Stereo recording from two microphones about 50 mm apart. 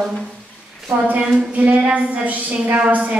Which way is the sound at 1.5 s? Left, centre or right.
Right.